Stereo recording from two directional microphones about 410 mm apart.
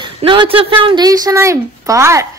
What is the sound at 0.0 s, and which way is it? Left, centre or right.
Speech, centre.